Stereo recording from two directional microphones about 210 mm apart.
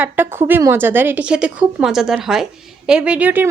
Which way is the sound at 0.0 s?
10° right (ahead or behind).